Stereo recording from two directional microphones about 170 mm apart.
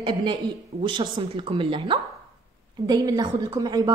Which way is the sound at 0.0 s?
30° right (ahead or behind).